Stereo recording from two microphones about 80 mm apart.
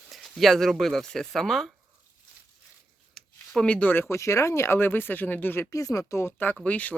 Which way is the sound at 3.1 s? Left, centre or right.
Centre.